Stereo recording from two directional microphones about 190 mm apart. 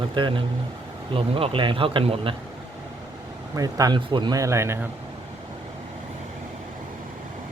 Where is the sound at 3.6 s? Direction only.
20° right (ahead or behind).